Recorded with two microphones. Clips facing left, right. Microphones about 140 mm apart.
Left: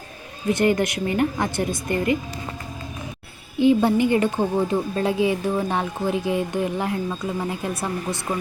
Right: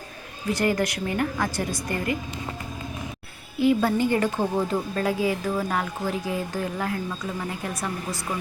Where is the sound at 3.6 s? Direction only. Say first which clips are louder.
Left 4 dB; 20° left (ahead or behind).